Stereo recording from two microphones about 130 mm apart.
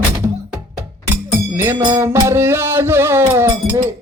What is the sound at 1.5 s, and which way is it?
Music, 15° right (ahead or behind).